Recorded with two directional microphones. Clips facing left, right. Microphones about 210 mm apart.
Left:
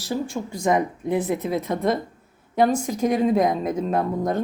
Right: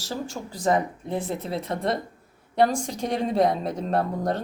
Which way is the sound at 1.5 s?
30° right (ahead or behind).